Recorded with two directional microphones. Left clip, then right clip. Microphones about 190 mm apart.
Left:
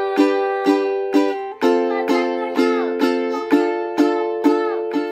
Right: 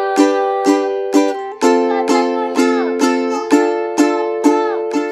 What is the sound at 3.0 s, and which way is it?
Music, 25° right (ahead or behind).